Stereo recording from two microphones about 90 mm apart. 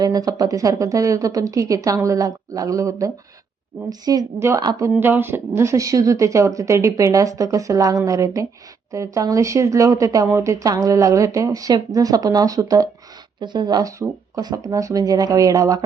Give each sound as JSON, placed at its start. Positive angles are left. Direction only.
{"t": 0.0, "sound": "a woman's voice", "side_deg": -45}
{"t": 4.4, "sound": "speech", "side_deg": -30}
{"t": 13.4, "sound": "speech", "side_deg": -55}